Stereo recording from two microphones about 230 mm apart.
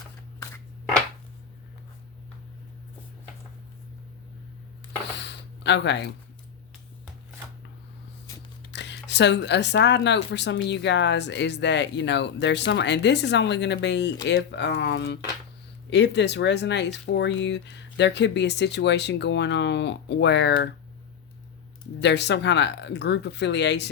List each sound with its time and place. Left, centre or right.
5.1 s a sound: left
8.7 s speech: left
22.0 s speech: left